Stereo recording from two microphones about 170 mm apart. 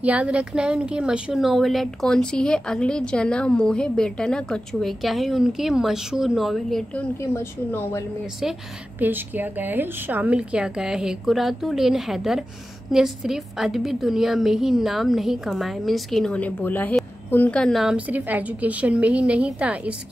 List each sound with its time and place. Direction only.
0.0 s a woman's voice: 5° right (ahead or behind)
7.2 s a woman's voice: 15° left (ahead or behind)
9.0 s a woman's voice: 10° right (ahead or behind)